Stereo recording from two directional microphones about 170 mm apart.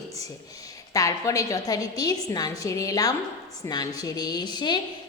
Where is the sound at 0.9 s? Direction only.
20° left (ahead or behind).